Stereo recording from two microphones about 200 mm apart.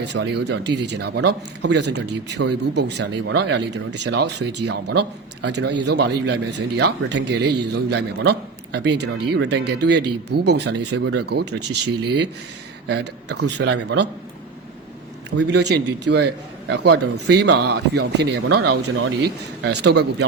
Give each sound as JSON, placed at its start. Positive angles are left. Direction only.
{"t": 0.0, "sound": "speech", "side_deg": -60}
{"t": 15.4, "sound": "speech", "side_deg": -55}